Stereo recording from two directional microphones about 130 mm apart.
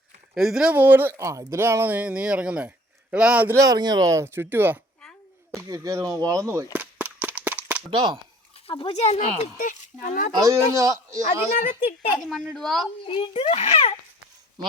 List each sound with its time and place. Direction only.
0.3 s speech: 5° right (ahead or behind)
3.5 s speech: 25° right (ahead or behind)
5.5 s speech: 25° right (ahead or behind)
6.7 s cap gun: 10° right (ahead or behind)
7.9 s speech: 40° right (ahead or behind)
8.6 s a child's voice: 45° left (ahead or behind)
9.0 s speech: 55° left (ahead or behind)
9.6 s a child's voice: 85° left
10.3 s speech: 25° right (ahead or behind)
12.2 s a woman's voice: centre (ahead or behind)
13.1 s a child's voice: 45° left (ahead or behind)